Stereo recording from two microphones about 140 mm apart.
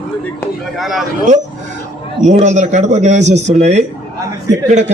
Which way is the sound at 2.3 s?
55° right (ahead or behind).